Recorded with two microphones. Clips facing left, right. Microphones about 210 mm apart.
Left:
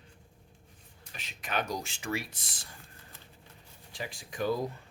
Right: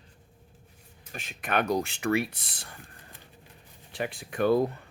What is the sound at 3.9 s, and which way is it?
Speech, 60° right (ahead or behind).